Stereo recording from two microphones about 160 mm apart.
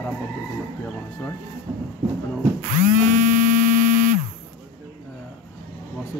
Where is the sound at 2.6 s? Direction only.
55° right (ahead or behind).